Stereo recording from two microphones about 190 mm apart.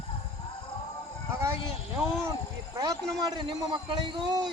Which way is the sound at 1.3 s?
15° right (ahead or behind).